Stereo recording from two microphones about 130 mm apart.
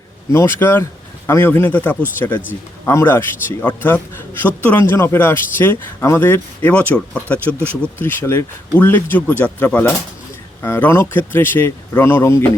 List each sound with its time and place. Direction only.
0.3 s speech: 20° left (ahead or behind)